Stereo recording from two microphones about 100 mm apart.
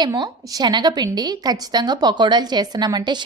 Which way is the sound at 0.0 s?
45° right (ahead or behind).